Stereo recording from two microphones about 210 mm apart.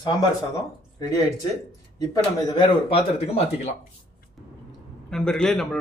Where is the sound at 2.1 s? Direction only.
20° left (ahead or behind).